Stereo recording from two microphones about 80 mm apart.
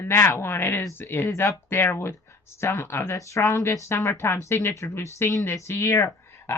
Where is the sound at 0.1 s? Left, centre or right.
Left.